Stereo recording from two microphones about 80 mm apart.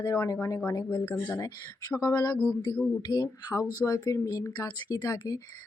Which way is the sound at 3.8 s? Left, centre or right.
Left.